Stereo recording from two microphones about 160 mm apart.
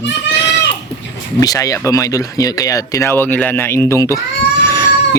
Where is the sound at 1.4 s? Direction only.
20° left (ahead or behind).